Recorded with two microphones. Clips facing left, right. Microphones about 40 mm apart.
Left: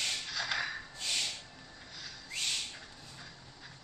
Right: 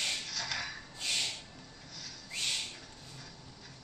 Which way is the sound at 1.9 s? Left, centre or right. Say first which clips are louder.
Left 1 dB; left.